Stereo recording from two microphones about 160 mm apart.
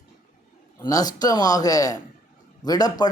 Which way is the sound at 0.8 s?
25° left (ahead or behind).